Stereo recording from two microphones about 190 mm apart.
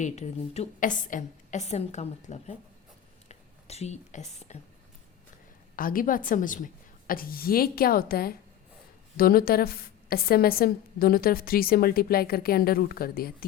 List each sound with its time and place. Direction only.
0.0 s a woman's voice: 35° left (ahead or behind)
5.7 s a woman's voice: 50° left (ahead or behind)